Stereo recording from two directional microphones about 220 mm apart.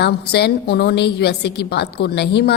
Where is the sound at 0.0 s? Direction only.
50° left (ahead or behind).